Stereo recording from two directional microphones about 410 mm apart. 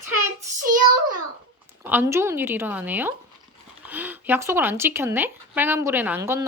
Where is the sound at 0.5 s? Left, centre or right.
Centre.